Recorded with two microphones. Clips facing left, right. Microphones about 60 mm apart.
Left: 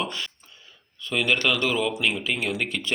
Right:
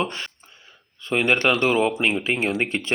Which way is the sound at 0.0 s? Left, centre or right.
Right.